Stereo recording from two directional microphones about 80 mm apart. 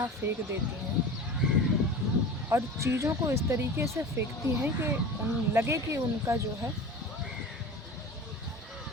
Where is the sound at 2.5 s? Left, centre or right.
Right.